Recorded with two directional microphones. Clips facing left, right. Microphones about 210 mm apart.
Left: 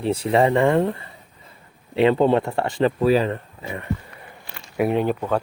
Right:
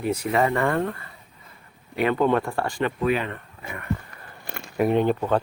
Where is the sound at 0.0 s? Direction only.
30° left (ahead or behind).